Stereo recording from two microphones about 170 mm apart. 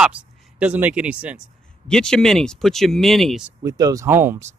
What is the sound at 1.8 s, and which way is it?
Speech, 5° left (ahead or behind).